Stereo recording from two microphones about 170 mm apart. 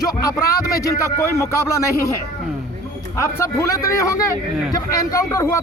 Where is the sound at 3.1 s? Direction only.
15° left (ahead or behind).